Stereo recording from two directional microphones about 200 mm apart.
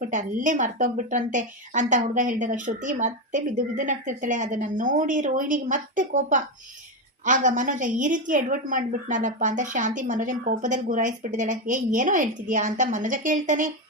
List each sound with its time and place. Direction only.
0.0 s a woman's voice: 40° right (ahead or behind)